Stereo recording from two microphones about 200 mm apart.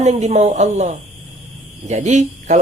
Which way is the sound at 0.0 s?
35° right (ahead or behind).